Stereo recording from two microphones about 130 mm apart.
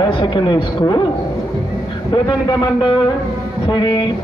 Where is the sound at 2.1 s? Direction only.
40° left (ahead or behind).